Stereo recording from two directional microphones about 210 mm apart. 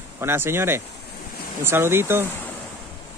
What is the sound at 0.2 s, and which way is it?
Speech, 10° right (ahead or behind).